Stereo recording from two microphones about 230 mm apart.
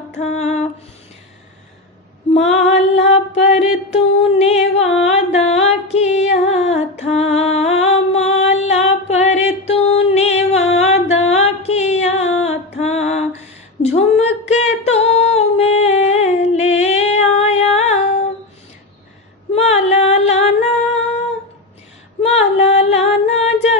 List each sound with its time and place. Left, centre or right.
0.2 s female singing: left
2.3 s female singing: left
3.5 s a sound: left
12.7 s music: left
13.8 s a sound: left
14.5 s music: left
19.5 s music: left
22.2 s female singing: left